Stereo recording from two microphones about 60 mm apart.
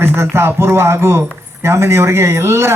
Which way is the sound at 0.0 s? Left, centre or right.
Right.